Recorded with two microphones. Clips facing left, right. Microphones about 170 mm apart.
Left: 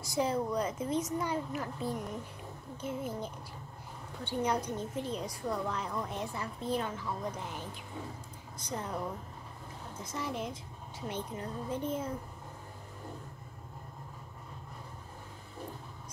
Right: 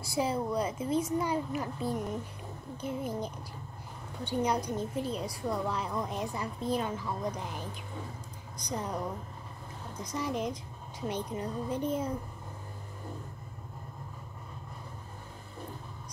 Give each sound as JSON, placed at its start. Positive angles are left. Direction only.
{"t": 0.0, "sound": "a woman's voice", "side_deg": -10}
{"t": 8.5, "sound": "a woman's voice", "side_deg": -15}